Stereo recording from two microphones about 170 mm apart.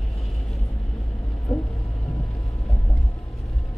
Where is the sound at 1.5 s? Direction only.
10° left (ahead or behind).